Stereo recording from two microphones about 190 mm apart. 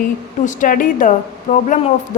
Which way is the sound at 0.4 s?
40° left (ahead or behind).